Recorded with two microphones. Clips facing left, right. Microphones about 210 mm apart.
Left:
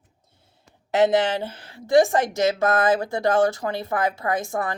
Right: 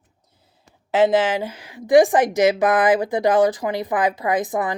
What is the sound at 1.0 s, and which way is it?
Speech, 5° right (ahead or behind).